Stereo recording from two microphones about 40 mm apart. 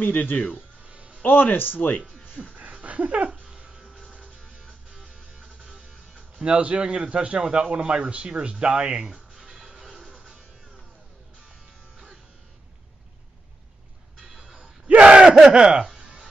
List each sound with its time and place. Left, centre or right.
0.0 s speech: left
0.8 s music: right
1.2 s speech: left
2.0 s speech: left
2.5 s a sound: right
3.4 s music: right
3.8 s music: centre
4.9 s music: right
6.1 s a man's voice: right
14.2 s music: centre
14.9 s a sound: right
15.5 s speech: right
16.0 s music: right